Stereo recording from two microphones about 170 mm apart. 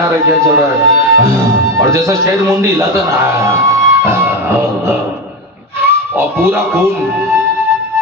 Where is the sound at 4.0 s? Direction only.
15° right (ahead or behind).